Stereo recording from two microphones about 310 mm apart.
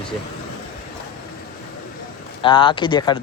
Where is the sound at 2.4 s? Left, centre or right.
Centre.